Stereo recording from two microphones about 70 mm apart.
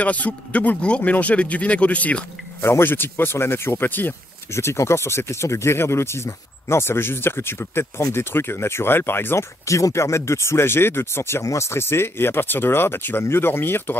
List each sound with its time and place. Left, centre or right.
0.0 s speech: left
2.6 s speech: left